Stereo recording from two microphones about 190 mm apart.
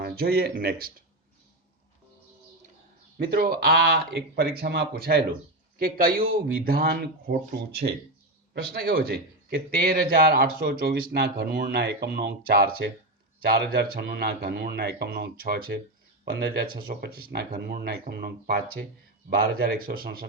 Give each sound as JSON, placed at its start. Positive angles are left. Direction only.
{"t": 0.0, "sound": "speech", "side_deg": -55}
{"t": 3.2, "sound": "a man's voice", "side_deg": -55}